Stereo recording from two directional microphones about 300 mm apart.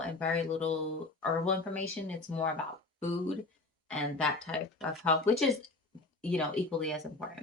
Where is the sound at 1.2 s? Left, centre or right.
Centre.